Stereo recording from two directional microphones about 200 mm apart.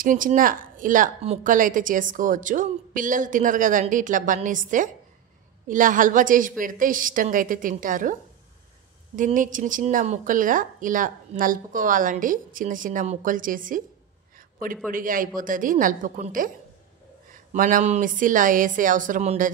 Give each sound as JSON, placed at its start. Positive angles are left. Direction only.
{"t": 0.0, "sound": "a woman's voice", "side_deg": -45}
{"t": 14.9, "sound": "a woman's voice", "side_deg": -45}